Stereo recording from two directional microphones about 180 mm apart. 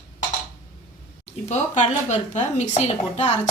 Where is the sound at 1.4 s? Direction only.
40° left (ahead or behind).